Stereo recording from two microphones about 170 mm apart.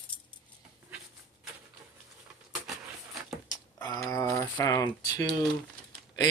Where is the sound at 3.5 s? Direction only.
15° left (ahead or behind).